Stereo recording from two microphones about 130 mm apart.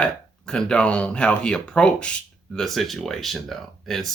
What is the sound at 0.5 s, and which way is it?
Speech, 5° left (ahead or behind).